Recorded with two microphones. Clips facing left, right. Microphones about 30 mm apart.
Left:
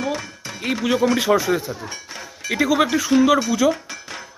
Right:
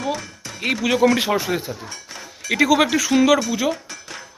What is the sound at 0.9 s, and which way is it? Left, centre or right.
Speech, right.